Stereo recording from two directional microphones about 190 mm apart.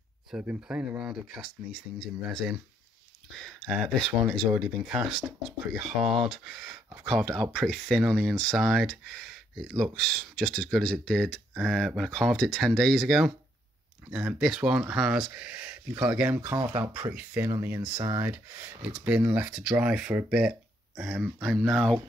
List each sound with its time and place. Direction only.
0.3 s speech: 5° right (ahead or behind)
3.6 s speech: centre (ahead or behind)